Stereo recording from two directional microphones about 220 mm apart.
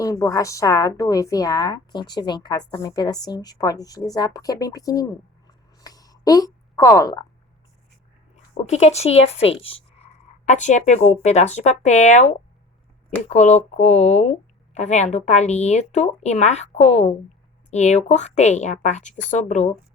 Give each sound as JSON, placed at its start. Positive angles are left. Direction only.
{"t": 0.0, "sound": "a woman's voice", "side_deg": 15}
{"t": 8.6, "sound": "speech", "side_deg": 30}